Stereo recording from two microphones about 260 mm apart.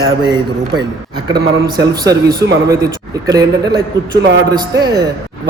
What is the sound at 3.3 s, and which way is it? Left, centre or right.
A man's voice, centre.